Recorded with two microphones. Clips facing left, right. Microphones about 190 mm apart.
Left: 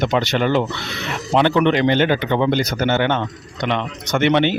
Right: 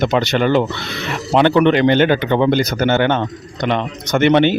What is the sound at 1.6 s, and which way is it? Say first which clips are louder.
Speech: right 3 dB; 55° right (ahead or behind).